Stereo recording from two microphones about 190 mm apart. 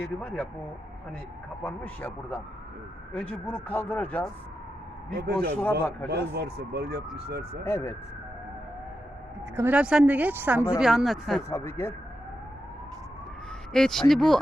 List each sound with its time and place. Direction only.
0.0 s speech: 5° left (ahead or behind)
1.6 s speech: 10° left (ahead or behind)
5.2 s a man's voice: 55° right (ahead or behind)
7.6 s speech: 15° left (ahead or behind)
9.6 s speech: 10° right (ahead or behind)
11.4 s speech: 15° left (ahead or behind)
13.7 s speech: 5° left (ahead or behind)